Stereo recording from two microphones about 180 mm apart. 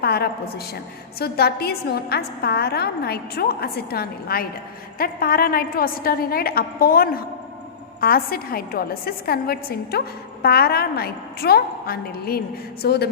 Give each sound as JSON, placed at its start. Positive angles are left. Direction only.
{"t": 0.0, "sound": "a woman's voice", "side_deg": 60}